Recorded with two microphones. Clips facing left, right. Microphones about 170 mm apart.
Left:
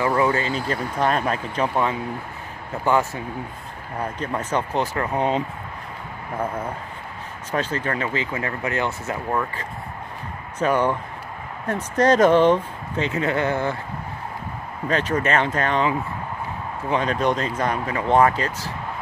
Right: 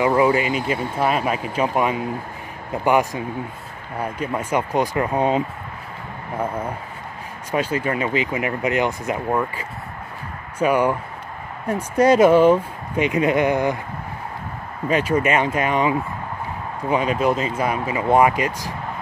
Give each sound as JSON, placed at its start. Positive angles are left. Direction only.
{"t": 0.0, "sound": "speech", "side_deg": -20}
{"t": 14.9, "sound": "speech", "side_deg": -10}